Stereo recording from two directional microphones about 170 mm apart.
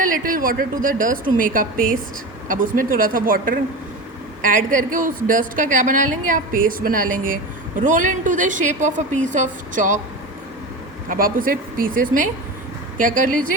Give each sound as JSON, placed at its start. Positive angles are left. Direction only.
{"t": 0.0, "sound": "a woman's voice", "side_deg": -55}
{"t": 11.1, "sound": "a woman's voice", "side_deg": -55}